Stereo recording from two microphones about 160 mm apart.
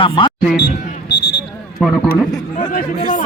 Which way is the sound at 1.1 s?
90° left.